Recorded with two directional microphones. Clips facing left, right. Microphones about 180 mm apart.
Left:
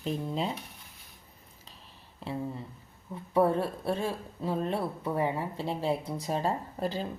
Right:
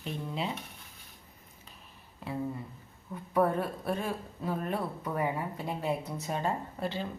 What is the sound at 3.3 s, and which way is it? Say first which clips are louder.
A woman's voice: left 2 dB; 30° left (ahead or behind).